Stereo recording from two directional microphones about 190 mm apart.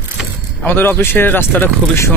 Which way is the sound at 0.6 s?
10° left (ahead or behind).